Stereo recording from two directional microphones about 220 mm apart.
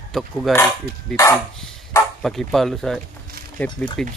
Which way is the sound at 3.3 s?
40° right (ahead or behind).